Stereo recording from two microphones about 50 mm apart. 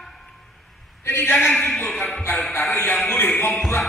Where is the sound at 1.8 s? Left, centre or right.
Left.